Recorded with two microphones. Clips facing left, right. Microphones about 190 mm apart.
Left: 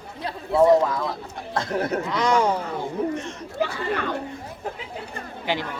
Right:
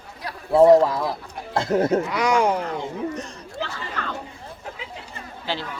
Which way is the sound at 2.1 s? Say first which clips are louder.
Right 1 dB; 10° right (ahead or behind).